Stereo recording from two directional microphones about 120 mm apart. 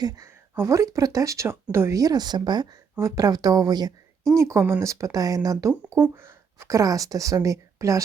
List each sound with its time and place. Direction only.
0.5 s a woman's voice: 25° right (ahead or behind)